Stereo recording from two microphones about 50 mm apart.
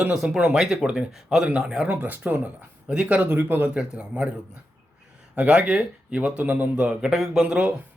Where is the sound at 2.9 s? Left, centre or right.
Right.